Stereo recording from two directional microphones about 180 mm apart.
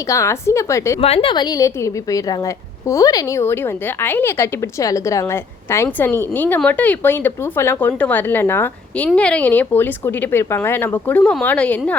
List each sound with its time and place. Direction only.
0.1 s a woman's voice: 15° left (ahead or behind)
1.0 s a woman's voice: 30° left (ahead or behind); by 11.9 s 5° left (ahead or behind)